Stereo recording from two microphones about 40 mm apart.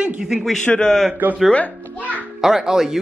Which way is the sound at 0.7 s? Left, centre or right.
Centre.